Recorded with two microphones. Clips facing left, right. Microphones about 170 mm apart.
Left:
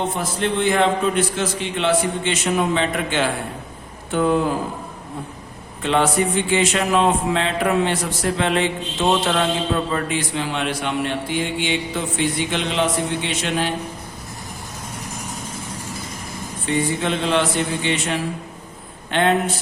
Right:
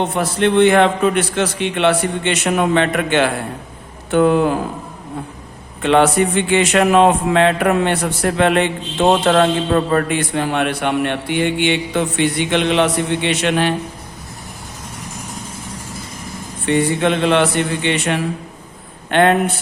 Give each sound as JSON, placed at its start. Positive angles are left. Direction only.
{"t": 0.2, "sound": "a man's voice", "side_deg": -70}
{"t": 5.8, "sound": "speech", "side_deg": -65}
{"t": 16.6, "sound": "speech", "side_deg": -65}